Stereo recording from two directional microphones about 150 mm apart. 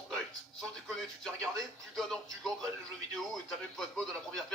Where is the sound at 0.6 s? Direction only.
Centre (ahead or behind).